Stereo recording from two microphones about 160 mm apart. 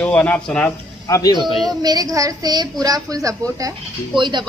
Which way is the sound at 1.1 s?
25° left (ahead or behind).